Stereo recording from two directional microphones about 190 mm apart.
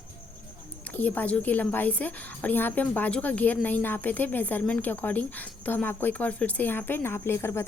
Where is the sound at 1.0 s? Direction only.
10° left (ahead or behind).